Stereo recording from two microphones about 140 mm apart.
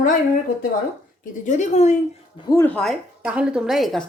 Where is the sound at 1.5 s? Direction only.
55° left (ahead or behind).